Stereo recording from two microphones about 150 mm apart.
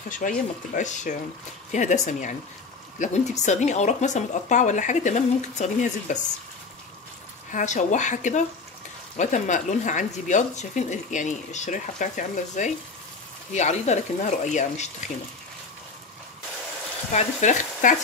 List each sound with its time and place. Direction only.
0.1 s speech: 60° left (ahead or behind)
7.5 s speech: 55° left (ahead or behind)
17.1 s speech: 55° left (ahead or behind)